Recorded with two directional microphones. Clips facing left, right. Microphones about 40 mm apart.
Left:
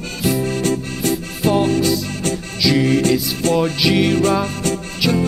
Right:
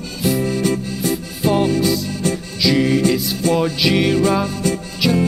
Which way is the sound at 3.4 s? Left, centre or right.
Left.